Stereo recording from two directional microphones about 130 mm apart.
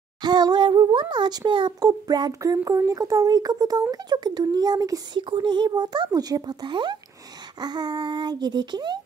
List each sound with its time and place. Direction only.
0.2 s a child's voice: 30° right (ahead or behind)